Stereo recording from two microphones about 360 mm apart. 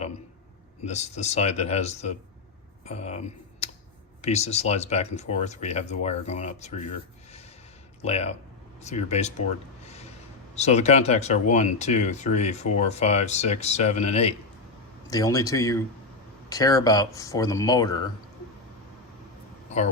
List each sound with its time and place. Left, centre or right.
0.9 s speech: centre
4.2 s speech: centre
9.8 s a sound: centre
10.5 s speech: centre